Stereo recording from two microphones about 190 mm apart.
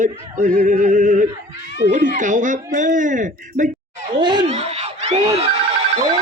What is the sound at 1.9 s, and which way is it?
Speech, 40° right (ahead or behind).